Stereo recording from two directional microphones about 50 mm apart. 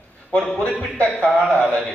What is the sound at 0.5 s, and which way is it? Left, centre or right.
Speech, left.